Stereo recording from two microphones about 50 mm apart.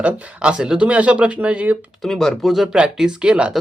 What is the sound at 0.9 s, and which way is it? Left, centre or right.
Speech, right.